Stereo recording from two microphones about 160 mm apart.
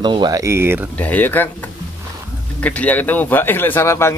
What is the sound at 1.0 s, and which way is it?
Speech, 10° left (ahead or behind).